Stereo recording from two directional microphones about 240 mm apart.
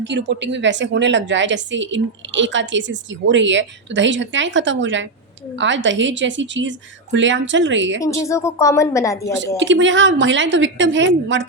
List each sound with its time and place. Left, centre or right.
0.0 s a woman's voice: right
8.0 s a woman's voice: centre
9.6 s a woman's voice: right